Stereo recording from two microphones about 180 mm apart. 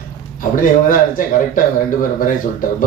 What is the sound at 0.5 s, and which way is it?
A man's voice, 50° left (ahead or behind).